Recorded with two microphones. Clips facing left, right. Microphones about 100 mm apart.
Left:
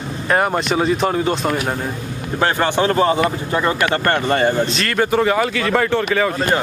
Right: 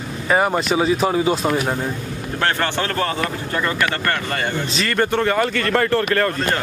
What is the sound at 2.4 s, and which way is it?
Speech, 15° left (ahead or behind).